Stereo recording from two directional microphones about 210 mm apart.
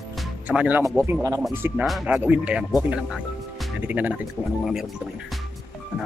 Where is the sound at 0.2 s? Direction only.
5° right (ahead or behind).